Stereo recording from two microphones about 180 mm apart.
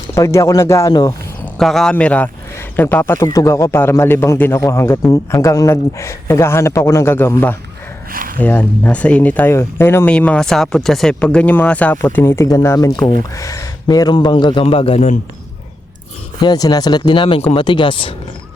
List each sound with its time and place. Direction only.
0.1 s speech: 15° left (ahead or behind)
1.5 s a man's voice: centre (ahead or behind); by 15.2 s 35° left (ahead or behind)
16.4 s a man's voice: 20° left (ahead or behind)